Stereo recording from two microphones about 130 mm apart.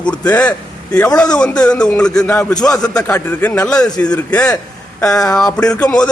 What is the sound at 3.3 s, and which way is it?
A man's voice, 15° left (ahead or behind).